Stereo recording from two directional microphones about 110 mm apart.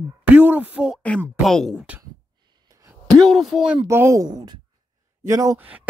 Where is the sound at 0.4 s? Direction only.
15° right (ahead or behind).